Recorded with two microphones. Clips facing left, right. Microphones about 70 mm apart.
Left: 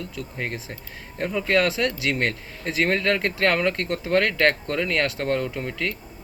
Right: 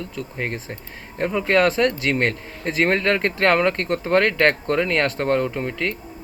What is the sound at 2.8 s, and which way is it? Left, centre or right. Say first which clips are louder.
Speech: right 3 dB; centre.